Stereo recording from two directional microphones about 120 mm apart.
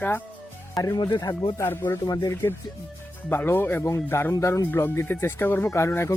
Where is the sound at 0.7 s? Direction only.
30° left (ahead or behind).